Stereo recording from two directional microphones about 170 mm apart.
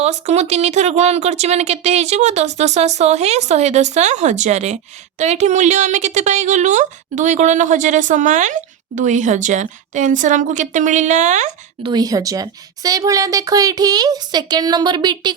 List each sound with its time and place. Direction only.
0.0 s a woman's voice: 40° right (ahead or behind)
11.8 s a child's voice: 25° right (ahead or behind)